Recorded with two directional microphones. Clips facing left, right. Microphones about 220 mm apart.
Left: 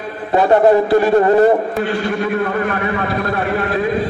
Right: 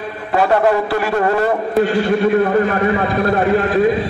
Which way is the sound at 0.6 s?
30° left (ahead or behind).